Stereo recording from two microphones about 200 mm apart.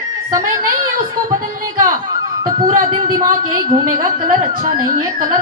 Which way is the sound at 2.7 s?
40° right (ahead or behind).